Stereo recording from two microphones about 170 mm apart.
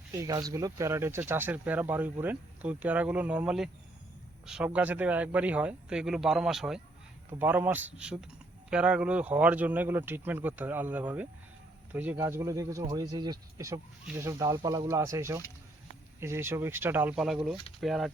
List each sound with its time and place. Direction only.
0.1 s speech: 20° right (ahead or behind); by 18.1 s centre (ahead or behind)